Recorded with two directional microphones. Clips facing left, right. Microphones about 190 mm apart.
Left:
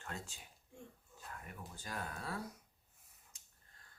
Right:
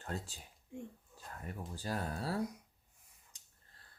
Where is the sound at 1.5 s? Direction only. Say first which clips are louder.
Right 9 dB; 35° right (ahead or behind).